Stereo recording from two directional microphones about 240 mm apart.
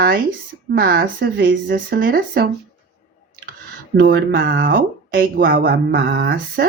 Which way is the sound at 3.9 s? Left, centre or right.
Right.